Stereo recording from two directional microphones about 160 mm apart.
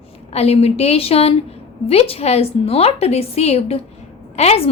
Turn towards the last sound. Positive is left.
turn(degrees=40)  # may be behind; listen again after turning